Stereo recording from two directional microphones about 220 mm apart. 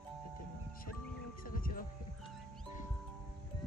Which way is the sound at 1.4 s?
40° left (ahead or behind).